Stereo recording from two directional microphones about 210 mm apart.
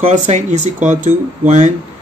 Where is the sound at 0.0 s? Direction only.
35° right (ahead or behind).